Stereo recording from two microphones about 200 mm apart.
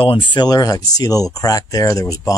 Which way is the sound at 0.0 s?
25° left (ahead or behind).